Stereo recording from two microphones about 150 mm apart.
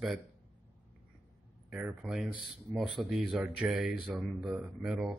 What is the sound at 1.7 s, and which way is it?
Speech, 5° right (ahead or behind).